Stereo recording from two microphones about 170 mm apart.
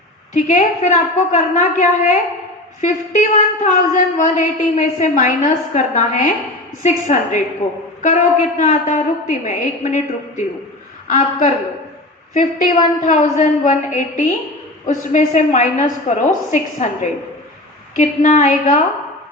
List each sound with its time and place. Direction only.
0.3 s a woman's voice: 45° left (ahead or behind)